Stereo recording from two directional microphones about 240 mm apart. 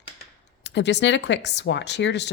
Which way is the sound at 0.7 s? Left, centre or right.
Left.